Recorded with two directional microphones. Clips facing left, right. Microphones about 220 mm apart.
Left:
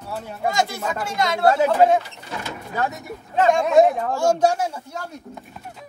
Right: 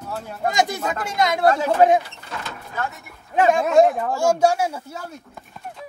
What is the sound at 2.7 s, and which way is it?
Speech, 40° left (ahead or behind).